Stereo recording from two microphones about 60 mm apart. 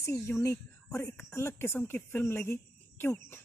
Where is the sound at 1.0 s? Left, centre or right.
Left.